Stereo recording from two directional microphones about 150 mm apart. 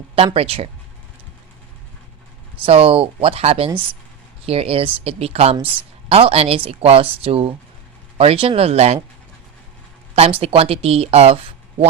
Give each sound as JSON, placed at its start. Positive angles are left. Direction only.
{"t": 0.3, "sound": "speech", "side_deg": -40}
{"t": 2.6, "sound": "speech", "side_deg": -40}
{"t": 10.2, "sound": "speech", "side_deg": -40}